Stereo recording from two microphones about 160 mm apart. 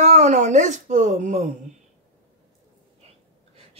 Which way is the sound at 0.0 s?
45° right (ahead or behind).